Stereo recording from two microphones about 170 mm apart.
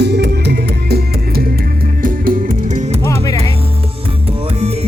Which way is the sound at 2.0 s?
55° right (ahead or behind).